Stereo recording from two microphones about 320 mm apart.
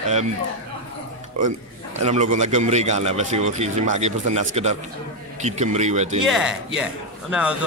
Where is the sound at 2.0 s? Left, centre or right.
Right.